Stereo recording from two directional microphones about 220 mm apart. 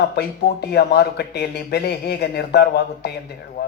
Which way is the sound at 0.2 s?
45° left (ahead or behind).